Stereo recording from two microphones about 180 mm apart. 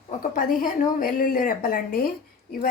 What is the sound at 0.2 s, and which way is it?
A woman's voice, 50° left (ahead or behind).